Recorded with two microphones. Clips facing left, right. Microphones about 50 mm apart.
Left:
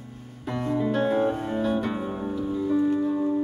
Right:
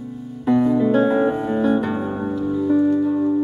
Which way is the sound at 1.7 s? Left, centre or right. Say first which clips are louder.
Right 6 dB; centre.